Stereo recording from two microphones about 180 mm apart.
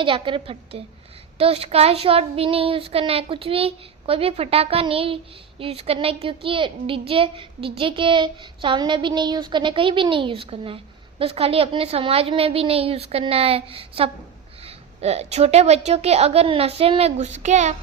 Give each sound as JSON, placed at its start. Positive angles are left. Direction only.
{"t": 0.0, "sound": "a woman's voice", "side_deg": -30}